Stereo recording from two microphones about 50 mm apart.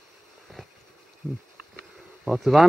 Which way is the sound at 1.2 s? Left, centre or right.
Centre.